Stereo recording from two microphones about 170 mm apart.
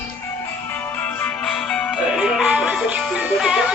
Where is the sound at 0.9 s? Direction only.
10° left (ahead or behind).